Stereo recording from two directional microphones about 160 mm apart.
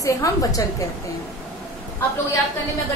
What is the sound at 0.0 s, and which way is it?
Speech, 20° left (ahead or behind).